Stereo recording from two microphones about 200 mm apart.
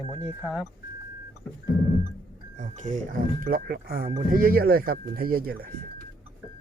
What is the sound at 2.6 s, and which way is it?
Speech, 35° right (ahead or behind).